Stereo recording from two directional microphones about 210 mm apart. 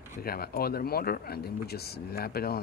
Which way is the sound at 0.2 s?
45° left (ahead or behind).